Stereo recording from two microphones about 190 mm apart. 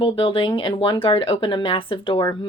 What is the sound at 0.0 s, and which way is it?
Speech, 25° left (ahead or behind).